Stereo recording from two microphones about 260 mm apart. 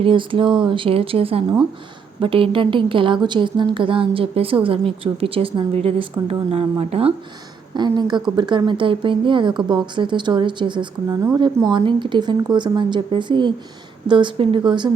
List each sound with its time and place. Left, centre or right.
0.0 s a woman's voice: centre